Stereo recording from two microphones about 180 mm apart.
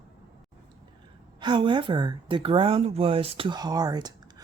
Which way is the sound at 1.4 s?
25° right (ahead or behind).